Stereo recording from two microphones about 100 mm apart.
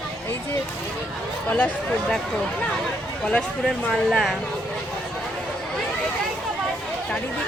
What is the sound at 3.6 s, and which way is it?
Speech, 5° left (ahead or behind).